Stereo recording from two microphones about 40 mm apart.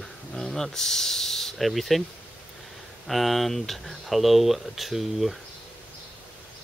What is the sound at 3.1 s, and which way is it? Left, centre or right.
Speech, centre.